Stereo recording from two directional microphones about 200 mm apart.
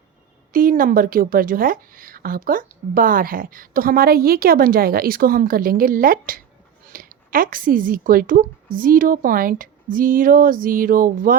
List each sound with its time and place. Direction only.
0.5 s a woman's voice: 45° right (ahead or behind)